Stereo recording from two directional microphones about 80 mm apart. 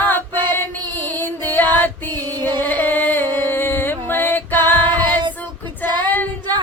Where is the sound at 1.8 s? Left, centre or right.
Left.